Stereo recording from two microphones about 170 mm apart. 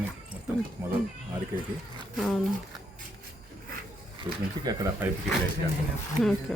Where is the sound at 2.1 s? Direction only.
Centre (ahead or behind).